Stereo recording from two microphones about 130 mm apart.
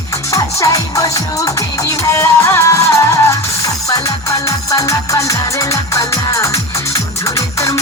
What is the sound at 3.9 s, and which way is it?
Music, 25° left (ahead or behind).